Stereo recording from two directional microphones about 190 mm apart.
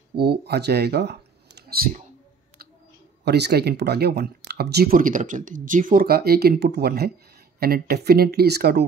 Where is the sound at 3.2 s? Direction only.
60° right (ahead or behind).